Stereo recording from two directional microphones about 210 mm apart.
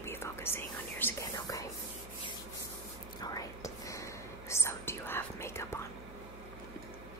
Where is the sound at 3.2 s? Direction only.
15° left (ahead or behind).